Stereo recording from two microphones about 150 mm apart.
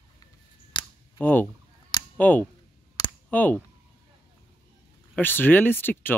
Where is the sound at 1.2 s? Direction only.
10° left (ahead or behind).